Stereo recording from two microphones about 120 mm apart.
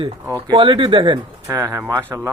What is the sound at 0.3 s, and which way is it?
Speech, 35° right (ahead or behind).